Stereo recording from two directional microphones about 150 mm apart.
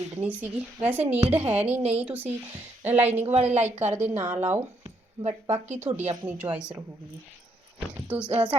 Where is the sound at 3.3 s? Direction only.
45° right (ahead or behind).